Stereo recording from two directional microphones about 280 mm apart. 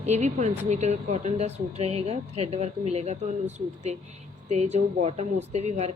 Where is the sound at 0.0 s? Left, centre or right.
Right.